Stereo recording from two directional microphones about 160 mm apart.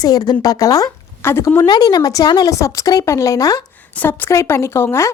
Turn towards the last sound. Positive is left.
turn(degrees=15)  # may be behind; listen again after turning